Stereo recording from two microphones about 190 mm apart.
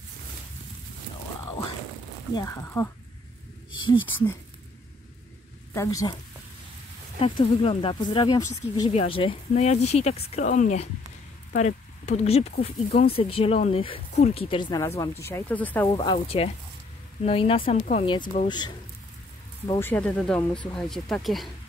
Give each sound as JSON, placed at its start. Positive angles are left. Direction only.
{"t": 2.3, "sound": "speech", "side_deg": 15}
{"t": 3.7, "sound": "speech", "side_deg": 25}
{"t": 5.7, "sound": "a woman's voice", "side_deg": 15}
{"t": 7.2, "sound": "speech", "side_deg": 25}
{"t": 15.9, "sound": "speech", "side_deg": 25}
{"t": 19.8, "sound": "speech", "side_deg": 10}